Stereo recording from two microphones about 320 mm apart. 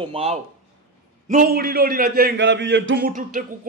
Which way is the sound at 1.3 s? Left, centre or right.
Right.